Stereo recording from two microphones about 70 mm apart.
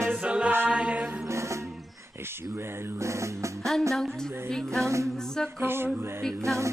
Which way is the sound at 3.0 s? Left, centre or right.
Right.